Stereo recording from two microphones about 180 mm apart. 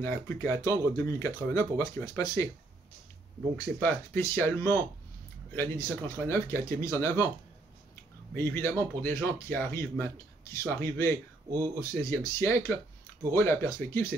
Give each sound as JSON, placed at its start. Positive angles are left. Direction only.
{"t": 0.0, "sound": "speech", "side_deg": 15}
{"t": 3.5, "sound": "speech", "side_deg": 15}
{"t": 8.4, "sound": "speech", "side_deg": 15}